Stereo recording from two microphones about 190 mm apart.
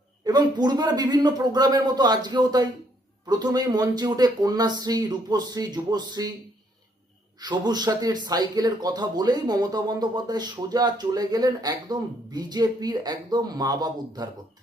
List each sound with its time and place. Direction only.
0.3 s speech: 20° right (ahead or behind)
7.3 s speech: 20° right (ahead or behind)